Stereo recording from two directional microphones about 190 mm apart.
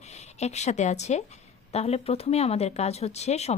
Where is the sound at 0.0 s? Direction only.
35° left (ahead or behind).